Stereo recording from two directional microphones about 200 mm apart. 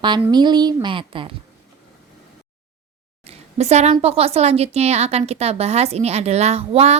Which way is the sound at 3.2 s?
30° right (ahead or behind).